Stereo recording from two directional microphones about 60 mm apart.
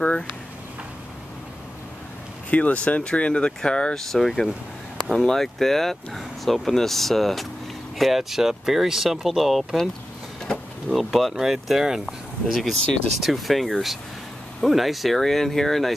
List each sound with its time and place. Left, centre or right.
2.5 s speech: left; by 9.8 s centre
10.9 s speech: centre